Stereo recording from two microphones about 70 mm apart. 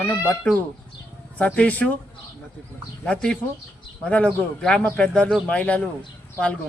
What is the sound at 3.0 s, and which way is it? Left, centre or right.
Speech, centre.